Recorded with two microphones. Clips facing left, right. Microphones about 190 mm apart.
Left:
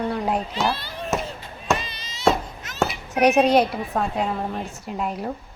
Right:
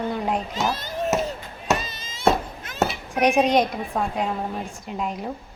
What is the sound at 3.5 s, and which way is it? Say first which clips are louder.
A woman's voice: left 2 dB; 5° left (ahead or behind).